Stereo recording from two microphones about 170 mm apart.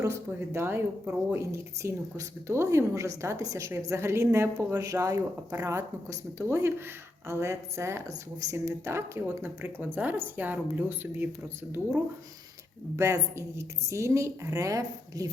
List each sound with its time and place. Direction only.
0.0 s speech: 15° right (ahead or behind)
13.0 s a woman's voice: 20° right (ahead or behind)